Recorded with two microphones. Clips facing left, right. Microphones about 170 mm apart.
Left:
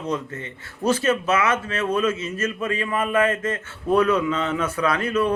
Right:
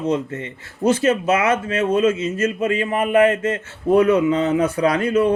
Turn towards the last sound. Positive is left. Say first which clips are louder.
# right 5 dB
turn(degrees=-30)  # may be behind; listen again after turning